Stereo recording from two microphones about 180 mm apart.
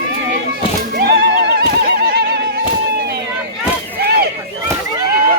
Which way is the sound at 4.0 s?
65° right (ahead or behind).